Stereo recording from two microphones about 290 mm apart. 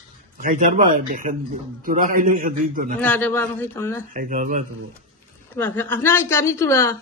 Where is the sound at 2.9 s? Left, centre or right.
Centre.